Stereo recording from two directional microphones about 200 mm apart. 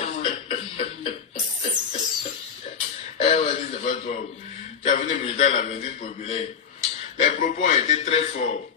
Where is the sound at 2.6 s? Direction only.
35° left (ahead or behind).